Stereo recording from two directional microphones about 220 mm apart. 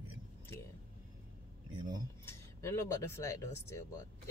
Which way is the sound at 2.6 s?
10° left (ahead or behind).